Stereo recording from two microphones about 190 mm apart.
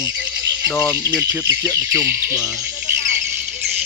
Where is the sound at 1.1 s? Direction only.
5° right (ahead or behind).